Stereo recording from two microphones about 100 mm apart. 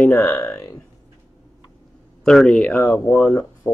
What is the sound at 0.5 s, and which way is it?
Burping, 35° left (ahead or behind).